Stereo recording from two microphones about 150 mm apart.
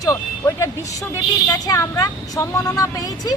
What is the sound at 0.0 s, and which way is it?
A woman's voice, 20° left (ahead or behind).